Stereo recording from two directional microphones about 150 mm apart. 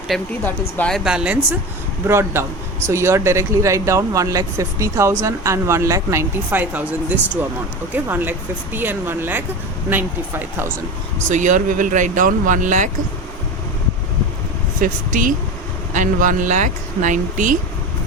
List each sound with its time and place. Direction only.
0.1 s speech: centre (ahead or behind)
2.0 s speech: 15° right (ahead or behind)
11.3 s speech: 55° right (ahead or behind)
14.8 s speech: 65° right (ahead or behind)